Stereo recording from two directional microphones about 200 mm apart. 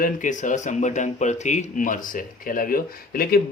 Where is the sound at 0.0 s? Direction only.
40° left (ahead or behind).